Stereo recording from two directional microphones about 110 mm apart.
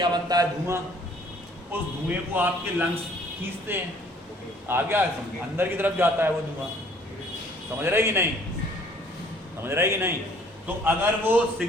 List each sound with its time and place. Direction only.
0.0 s speech: 40° right (ahead or behind)
1.7 s a man's voice: 15° right (ahead or behind)
7.8 s a man's voice: 20° right (ahead or behind)
9.6 s a man's voice: 20° right (ahead or behind)